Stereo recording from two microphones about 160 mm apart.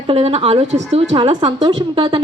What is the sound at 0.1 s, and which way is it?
A woman's voice, 40° right (ahead or behind).